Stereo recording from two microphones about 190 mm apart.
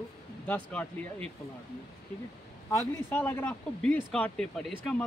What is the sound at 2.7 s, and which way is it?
Speech, 15° left (ahead or behind).